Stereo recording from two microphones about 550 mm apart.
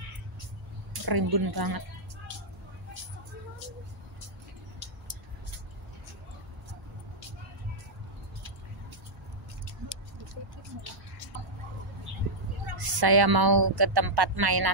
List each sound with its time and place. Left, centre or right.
1.0 s a woman's voice: right
12.7 s a woman's voice: right